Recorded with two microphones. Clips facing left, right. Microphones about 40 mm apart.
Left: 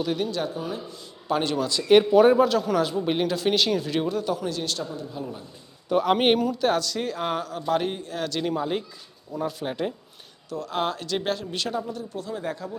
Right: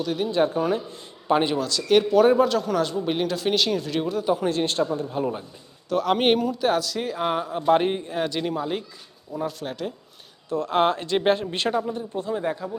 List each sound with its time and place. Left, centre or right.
0.3 s speech: right
0.5 s speech: right
1.6 s speech: centre
2.2 s speech: centre
4.4 s speech: right
5.9 s speech: centre
7.6 s speech: right
8.4 s speech: centre
10.5 s speech: right; by 12.7 s centre